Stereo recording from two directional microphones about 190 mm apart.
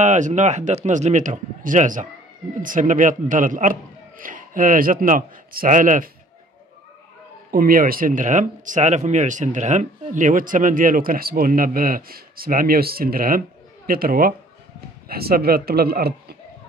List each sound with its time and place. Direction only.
0.0 s a man's voice: 40° right (ahead or behind)
7.5 s speech: 50° right (ahead or behind)